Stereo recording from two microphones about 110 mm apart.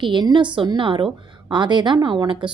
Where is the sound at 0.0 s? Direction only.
45° right (ahead or behind).